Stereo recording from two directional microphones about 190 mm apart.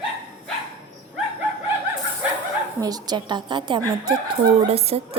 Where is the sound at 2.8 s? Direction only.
20° right (ahead or behind).